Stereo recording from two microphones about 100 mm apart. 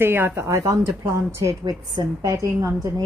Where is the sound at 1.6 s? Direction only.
45° right (ahead or behind).